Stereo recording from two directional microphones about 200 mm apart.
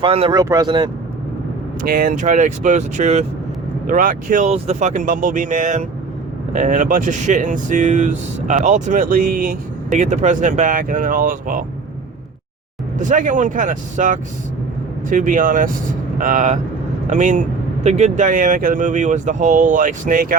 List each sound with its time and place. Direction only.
0.0 s speech: 25° right (ahead or behind)
1.8 s speech: 45° right (ahead or behind)
13.0 s speech: 40° right (ahead or behind)